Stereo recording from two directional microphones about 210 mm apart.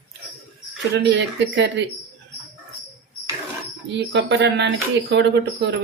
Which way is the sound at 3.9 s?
55° right (ahead or behind).